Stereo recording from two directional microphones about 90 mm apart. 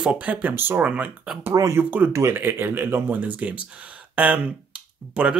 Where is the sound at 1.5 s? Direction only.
40° right (ahead or behind).